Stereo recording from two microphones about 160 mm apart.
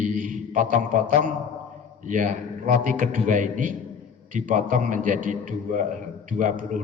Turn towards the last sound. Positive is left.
turn(degrees=-50)  # may be behind; listen again after turning